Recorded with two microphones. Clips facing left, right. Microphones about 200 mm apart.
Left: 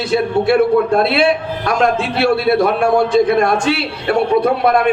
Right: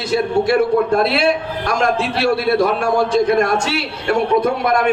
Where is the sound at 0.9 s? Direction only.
60° left (ahead or behind).